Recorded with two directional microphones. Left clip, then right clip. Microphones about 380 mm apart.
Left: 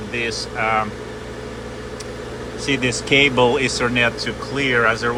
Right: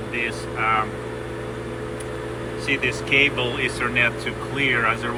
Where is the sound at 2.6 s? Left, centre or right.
Centre.